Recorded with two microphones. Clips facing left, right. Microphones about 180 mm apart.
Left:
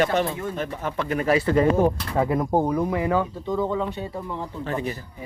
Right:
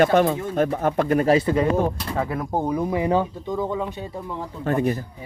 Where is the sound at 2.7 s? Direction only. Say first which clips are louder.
Right 1 dB; 15° right (ahead or behind).